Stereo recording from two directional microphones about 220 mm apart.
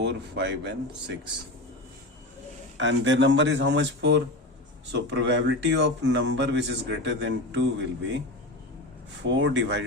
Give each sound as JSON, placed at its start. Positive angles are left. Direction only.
{"t": 0.0, "sound": "speech", "side_deg": -50}
{"t": 2.7, "sound": "speech", "side_deg": -60}
{"t": 9.2, "sound": "speech", "side_deg": -55}